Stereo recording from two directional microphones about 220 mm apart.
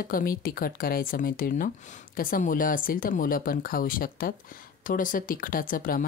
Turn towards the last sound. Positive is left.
turn(degrees=40)  # may be behind; listen again after turning